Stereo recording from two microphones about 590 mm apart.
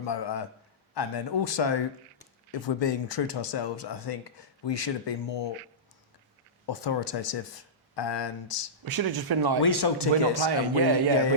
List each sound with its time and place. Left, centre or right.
0.0 s speech: left
6.7 s speech: left
8.8 s speech: right
9.6 s speech: left
10.4 s speech: right